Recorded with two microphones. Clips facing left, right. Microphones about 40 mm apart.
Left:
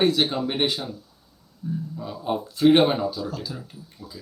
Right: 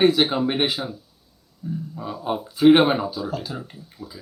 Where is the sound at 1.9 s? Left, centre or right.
Centre.